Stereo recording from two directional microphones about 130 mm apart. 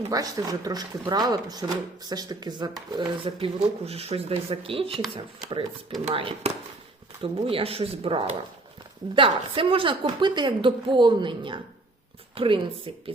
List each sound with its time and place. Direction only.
0.1 s speech: 30° right (ahead or behind); by 12.9 s 45° right (ahead or behind)